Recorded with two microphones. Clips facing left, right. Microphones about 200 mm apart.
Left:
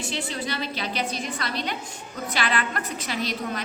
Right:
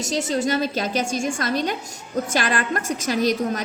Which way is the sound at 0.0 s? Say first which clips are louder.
Right 8 dB; 45° right (ahead or behind).